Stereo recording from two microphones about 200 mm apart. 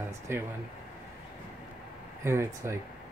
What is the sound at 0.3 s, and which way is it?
Speech, 10° right (ahead or behind).